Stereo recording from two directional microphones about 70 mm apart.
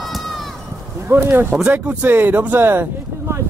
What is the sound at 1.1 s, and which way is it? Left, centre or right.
Speech, right.